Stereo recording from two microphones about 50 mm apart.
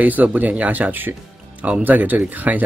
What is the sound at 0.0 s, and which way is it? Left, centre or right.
Speech, right.